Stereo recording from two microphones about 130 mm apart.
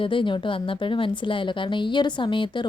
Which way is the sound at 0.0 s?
40° left (ahead or behind).